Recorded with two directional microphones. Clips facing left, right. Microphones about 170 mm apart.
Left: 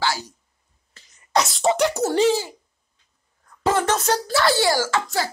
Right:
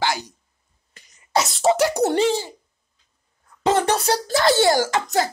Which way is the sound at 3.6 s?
20° right (ahead or behind).